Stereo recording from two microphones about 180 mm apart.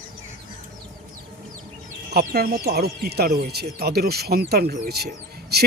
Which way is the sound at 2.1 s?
60° right (ahead or behind).